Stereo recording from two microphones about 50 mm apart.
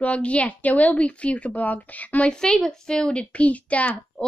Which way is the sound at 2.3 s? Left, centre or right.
Centre.